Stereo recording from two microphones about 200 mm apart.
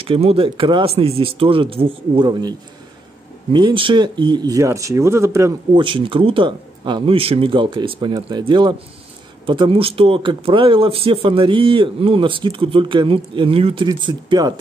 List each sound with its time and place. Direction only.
0.0 s speech: 30° right (ahead or behind)
3.5 s speech: 25° right (ahead or behind)
5.9 s speech: 25° right (ahead or behind)